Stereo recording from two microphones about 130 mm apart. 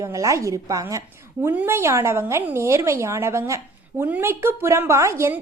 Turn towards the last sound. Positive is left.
turn(degrees=-20)  # may be behind; listen again after turning